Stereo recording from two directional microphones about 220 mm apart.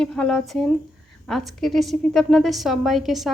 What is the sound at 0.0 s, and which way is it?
A woman's voice, 5° left (ahead or behind).